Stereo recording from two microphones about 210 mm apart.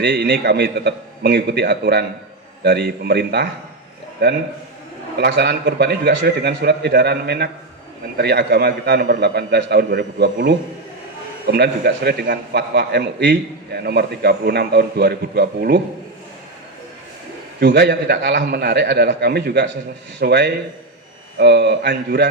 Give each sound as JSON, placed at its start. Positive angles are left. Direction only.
{"t": 0.0, "sound": "a man's voice", "side_deg": -50}
{"t": 11.4, "sound": "a man's voice", "side_deg": -50}
{"t": 17.6, "sound": "a man's voice", "side_deg": -50}